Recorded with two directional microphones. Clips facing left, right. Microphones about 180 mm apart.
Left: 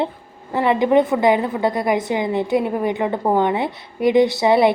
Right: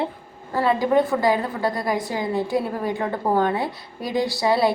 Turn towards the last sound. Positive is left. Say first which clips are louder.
# left 6 dB
turn(degrees=20)  # may be behind; listen again after turning